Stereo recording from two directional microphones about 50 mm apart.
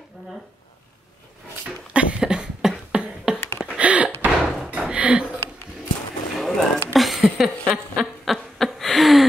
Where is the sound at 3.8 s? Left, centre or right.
Right.